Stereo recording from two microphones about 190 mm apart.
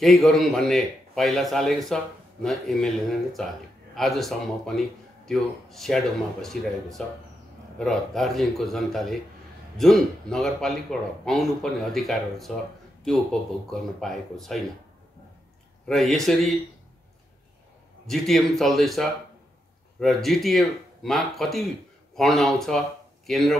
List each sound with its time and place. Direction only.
0.0 s speech: centre (ahead or behind)
3.9 s speech: centre (ahead or behind)
15.9 s speech: centre (ahead or behind)
18.0 s speech: centre (ahead or behind)